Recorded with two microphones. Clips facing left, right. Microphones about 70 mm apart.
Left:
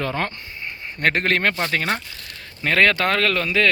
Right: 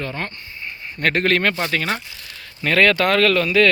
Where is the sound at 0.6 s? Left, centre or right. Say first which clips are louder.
Even; left.